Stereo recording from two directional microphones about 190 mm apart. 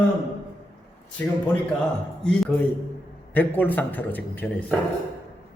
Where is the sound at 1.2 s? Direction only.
10° left (ahead or behind).